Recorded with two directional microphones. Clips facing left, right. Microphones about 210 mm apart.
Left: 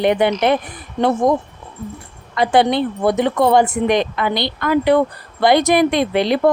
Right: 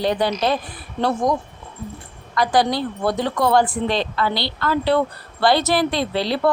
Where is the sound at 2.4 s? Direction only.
25° left (ahead or behind).